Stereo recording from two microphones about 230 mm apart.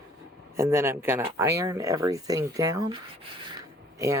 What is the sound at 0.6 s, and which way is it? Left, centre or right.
Speech, centre.